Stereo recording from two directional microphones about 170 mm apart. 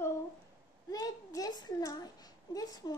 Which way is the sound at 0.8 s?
20° left (ahead or behind).